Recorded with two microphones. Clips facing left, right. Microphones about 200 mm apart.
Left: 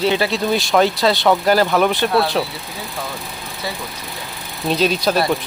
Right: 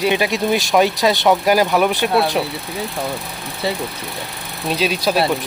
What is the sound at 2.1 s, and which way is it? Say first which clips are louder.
Speech: even; 25° right (ahead or behind).